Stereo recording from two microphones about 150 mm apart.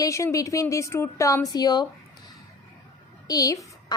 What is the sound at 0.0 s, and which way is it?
A woman's voice, 20° left (ahead or behind).